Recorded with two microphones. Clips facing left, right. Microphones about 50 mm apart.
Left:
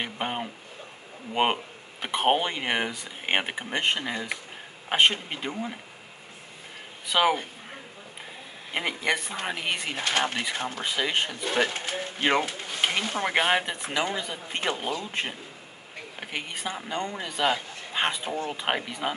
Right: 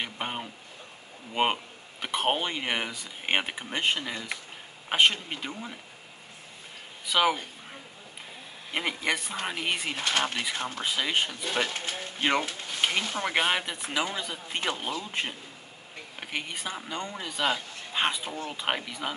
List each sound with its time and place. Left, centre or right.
0.0 s a sound: centre
1.3 s speech: centre
4.0 s speech: centre
7.1 s speech: centre
8.7 s speech: centre
9.3 s speech: centre
9.9 s speech: left
10.8 s speech: centre
11.2 s speech: centre
11.7 s speech: left
12.2 s speech: centre
13.3 s speech: centre
13.9 s speech: centre